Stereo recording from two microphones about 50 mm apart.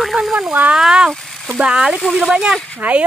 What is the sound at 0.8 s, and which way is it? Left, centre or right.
Speech, centre.